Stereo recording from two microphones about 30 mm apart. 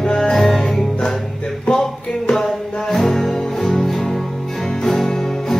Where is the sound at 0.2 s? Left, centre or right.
Centre.